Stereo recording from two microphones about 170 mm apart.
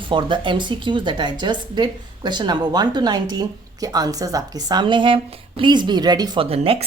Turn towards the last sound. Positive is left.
turn(degrees=-35)  # may be behind; listen again after turning